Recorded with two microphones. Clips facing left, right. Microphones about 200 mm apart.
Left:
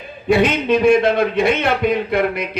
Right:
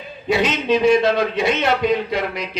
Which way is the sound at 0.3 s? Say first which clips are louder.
Left 3 dB; 55° left (ahead or behind).